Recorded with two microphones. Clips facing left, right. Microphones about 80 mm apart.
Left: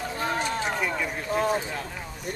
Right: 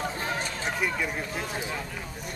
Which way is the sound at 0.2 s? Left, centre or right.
Left.